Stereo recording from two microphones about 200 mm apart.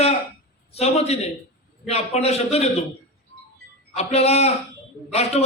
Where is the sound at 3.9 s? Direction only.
30° left (ahead or behind).